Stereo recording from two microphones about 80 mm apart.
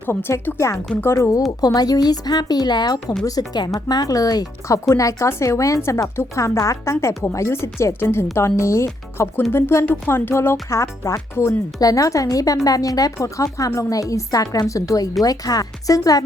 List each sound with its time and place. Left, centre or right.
0.0 s a woman's voice: left
1.5 s a woman's voice: left
11.8 s a woman's voice: left